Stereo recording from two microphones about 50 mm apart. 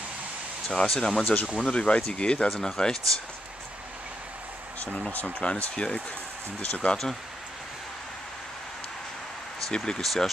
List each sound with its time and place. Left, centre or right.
0.7 s speech: centre
5.1 s speech: left
9.8 s speech: centre
10.0 s speech: centre